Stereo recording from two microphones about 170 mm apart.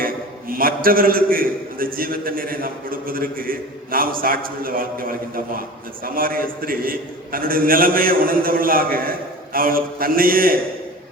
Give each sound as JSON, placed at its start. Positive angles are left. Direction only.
{"t": 0.0, "sound": "a man's voice", "side_deg": -55}